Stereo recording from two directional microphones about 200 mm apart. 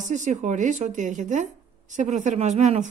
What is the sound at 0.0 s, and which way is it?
Speech, 35° right (ahead or behind).